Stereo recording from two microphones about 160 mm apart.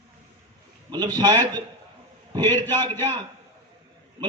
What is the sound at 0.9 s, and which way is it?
A man's voice, 25° right (ahead or behind).